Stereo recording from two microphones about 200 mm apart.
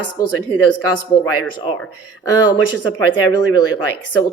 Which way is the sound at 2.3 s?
20° left (ahead or behind).